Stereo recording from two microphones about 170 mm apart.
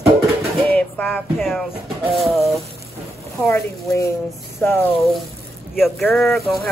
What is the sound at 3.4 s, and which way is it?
Speech, 15° left (ahead or behind).